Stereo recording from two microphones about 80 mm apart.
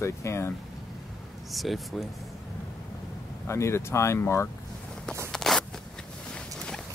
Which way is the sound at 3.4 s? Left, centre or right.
Left.